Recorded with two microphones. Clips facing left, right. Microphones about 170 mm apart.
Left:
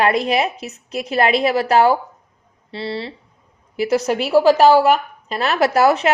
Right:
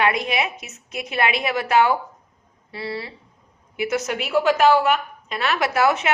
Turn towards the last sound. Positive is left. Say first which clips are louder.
# left 5 dB
turn(degrees=35)  # may be behind; listen again after turning